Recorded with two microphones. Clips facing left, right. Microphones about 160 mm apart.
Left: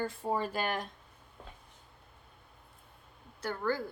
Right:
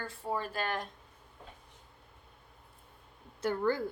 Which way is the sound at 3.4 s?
20° right (ahead or behind).